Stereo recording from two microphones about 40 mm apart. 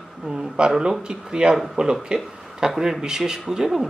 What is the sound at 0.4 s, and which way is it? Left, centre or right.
Speech, centre.